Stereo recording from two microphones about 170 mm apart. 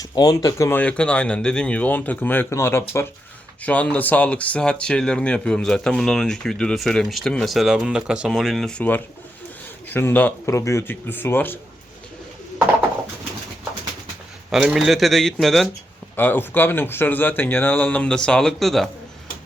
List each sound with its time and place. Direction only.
0.0 s speech: 20° left (ahead or behind)
14.5 s speech: 5° right (ahead or behind)
16.1 s speech: 10° left (ahead or behind)